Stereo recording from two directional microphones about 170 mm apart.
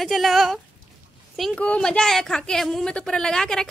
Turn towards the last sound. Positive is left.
turn(degrees=5)  # may be behind; listen again after turning